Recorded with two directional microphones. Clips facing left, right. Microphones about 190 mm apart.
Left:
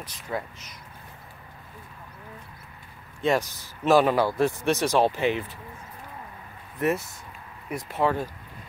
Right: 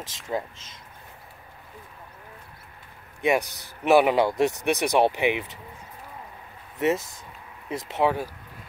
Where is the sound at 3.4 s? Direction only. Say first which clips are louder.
Right 1 dB; 65° right (ahead or behind).